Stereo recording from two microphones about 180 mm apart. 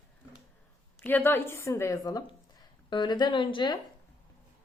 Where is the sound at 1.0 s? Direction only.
10° left (ahead or behind).